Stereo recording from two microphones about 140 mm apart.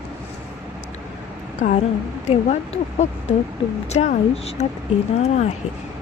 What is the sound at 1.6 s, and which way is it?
Speech, 65° left (ahead or behind).